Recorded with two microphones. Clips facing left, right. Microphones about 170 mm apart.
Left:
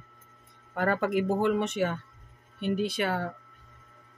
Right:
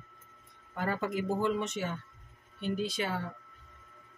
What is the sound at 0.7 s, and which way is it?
Speech, 65° left (ahead or behind).